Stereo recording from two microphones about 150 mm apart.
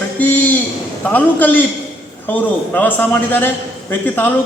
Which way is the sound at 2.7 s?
10° left (ahead or behind).